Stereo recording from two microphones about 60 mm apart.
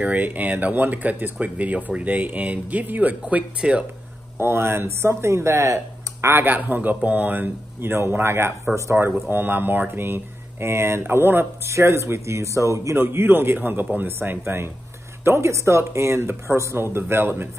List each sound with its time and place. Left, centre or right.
0.0 s speech: right
4.4 s speech: right
6.2 s speech: right
12.9 s speech: right